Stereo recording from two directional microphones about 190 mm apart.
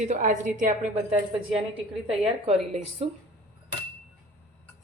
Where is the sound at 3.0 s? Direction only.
30° right (ahead or behind).